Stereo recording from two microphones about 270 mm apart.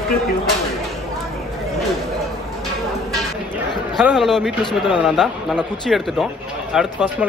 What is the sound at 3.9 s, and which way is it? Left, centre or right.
Speech, centre.